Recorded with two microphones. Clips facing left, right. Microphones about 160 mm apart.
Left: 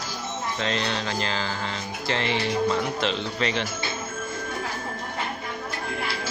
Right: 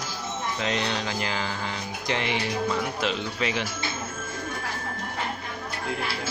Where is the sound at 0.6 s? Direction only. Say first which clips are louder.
Left 1 dB; 15° right (ahead or behind).